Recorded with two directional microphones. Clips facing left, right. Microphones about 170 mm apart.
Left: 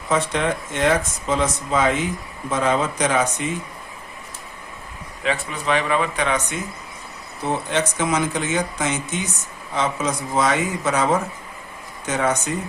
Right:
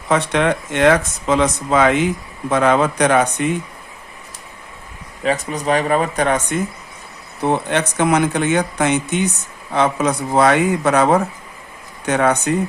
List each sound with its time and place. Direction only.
0.1 s speech: 70° right (ahead or behind)
5.2 s speech: 40° right (ahead or behind)
7.4 s speech: 60° right (ahead or behind)